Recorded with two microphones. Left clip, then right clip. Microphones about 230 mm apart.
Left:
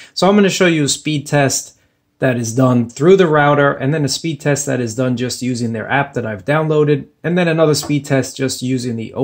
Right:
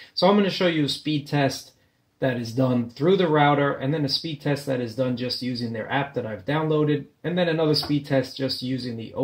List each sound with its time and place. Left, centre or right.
0.2 s speech: left